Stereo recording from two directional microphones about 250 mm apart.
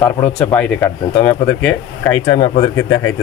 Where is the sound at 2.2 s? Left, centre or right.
Centre.